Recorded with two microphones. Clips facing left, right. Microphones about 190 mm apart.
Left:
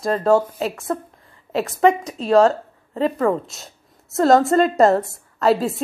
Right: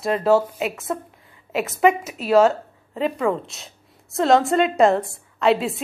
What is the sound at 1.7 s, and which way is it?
A woman's voice, 5° right (ahead or behind).